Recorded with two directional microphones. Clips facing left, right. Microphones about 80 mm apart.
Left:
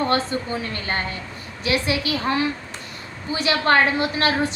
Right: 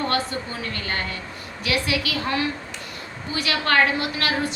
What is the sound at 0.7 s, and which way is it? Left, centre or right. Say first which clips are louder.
A woman's voice: left 2 dB; left.